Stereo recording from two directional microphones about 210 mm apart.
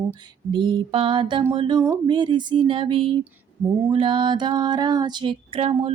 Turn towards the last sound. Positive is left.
turn(degrees=-25)  # may be behind; listen again after turning